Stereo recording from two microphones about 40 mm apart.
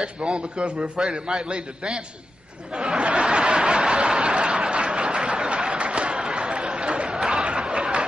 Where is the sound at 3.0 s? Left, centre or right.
Right.